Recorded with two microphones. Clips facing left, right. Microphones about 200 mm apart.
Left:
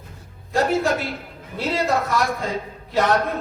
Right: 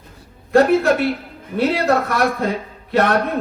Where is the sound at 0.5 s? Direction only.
60° right (ahead or behind).